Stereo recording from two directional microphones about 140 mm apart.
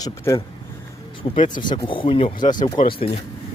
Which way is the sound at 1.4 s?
65° left (ahead or behind).